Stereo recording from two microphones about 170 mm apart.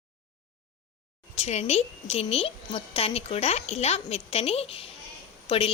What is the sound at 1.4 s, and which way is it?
A woman's voice, 40° left (ahead or behind).